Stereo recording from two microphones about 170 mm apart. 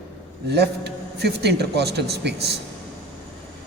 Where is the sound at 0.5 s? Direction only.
75° right (ahead or behind).